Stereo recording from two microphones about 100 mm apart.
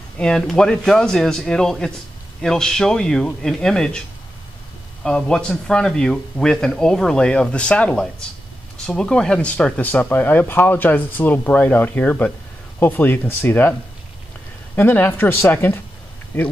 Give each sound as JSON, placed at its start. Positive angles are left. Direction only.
{"t": 0.2, "sound": "a man's voice", "side_deg": 5}
{"t": 5.0, "sound": "speech", "side_deg": 10}
{"t": 14.8, "sound": "speech", "side_deg": 20}